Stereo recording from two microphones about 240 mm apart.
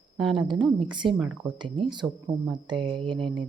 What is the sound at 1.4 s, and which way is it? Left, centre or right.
Speech, centre.